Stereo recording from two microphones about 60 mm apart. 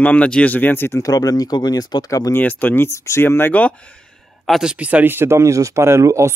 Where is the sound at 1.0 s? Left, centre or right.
Left.